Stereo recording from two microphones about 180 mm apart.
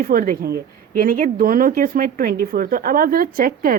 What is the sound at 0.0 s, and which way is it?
Speech, 50° right (ahead or behind).